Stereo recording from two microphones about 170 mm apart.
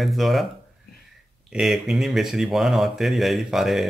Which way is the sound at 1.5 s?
Centre (ahead or behind).